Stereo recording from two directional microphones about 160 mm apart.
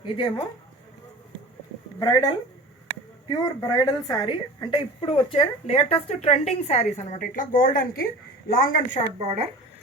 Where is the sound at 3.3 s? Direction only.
25° left (ahead or behind); by 9.0 s 60° left (ahead or behind).